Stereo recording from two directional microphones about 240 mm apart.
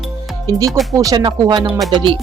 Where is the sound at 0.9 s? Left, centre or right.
Centre.